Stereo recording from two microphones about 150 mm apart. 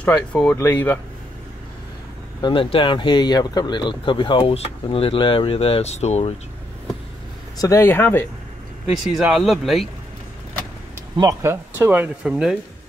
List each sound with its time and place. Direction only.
0.3 s speech: 10° left (ahead or behind)
2.4 s speech: 35° left (ahead or behind)
7.5 s speech: 20° left (ahead or behind)
8.9 s speech: centre (ahead or behind)
11.1 s speech: 25° right (ahead or behind)
11.7 s speech: 10° right (ahead or behind)